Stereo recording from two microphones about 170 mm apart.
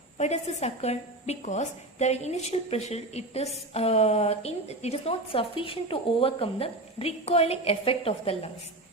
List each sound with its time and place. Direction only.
0.2 s a woman's voice: 40° left (ahead or behind)